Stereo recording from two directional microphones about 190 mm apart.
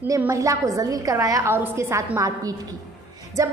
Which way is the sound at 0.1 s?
15° right (ahead or behind).